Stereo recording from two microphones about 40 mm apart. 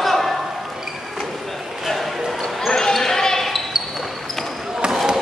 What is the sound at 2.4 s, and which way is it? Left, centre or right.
Basketball bounce, centre.